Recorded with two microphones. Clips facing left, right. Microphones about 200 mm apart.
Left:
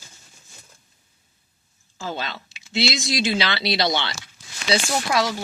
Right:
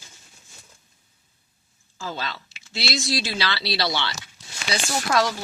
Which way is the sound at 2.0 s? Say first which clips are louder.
Left 2 dB; 20° left (ahead or behind).